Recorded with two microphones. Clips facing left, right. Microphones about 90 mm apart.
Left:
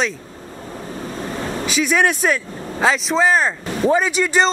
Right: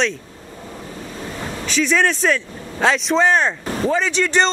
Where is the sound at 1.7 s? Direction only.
10° left (ahead or behind).